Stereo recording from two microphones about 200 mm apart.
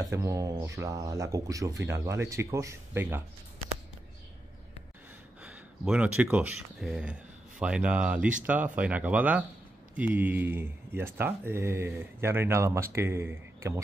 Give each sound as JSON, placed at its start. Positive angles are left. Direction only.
{"t": 0.0, "sound": "speech", "side_deg": -15}
{"t": 5.4, "sound": "speech", "side_deg": -5}